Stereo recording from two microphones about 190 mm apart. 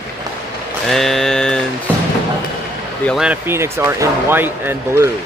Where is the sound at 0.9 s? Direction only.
Centre (ahead or behind).